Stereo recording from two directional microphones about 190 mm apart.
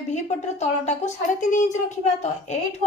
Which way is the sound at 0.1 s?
40° left (ahead or behind).